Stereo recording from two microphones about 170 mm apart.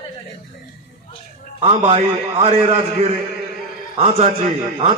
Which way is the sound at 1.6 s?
35° right (ahead or behind).